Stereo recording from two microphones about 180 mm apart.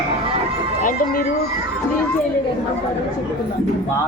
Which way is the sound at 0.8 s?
45° left (ahead or behind).